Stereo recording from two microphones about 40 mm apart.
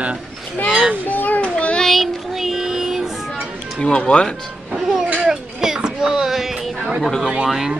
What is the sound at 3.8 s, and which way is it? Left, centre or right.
Speech, left.